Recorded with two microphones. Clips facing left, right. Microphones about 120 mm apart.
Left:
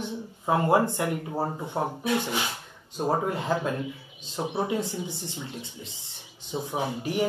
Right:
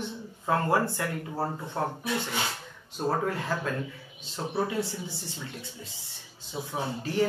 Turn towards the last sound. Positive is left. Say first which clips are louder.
# left 1 dB
turn(degrees=15)  # may be behind; listen again after turning